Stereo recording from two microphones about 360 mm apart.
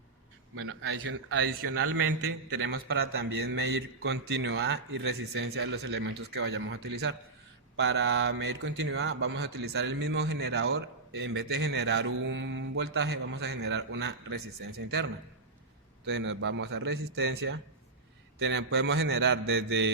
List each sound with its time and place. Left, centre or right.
0.5 s a man's voice: right